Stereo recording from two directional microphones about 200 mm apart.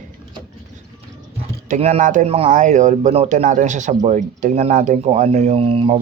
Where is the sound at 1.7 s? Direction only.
35° right (ahead or behind).